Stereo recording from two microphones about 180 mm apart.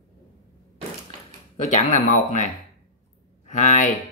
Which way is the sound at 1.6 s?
40° left (ahead or behind).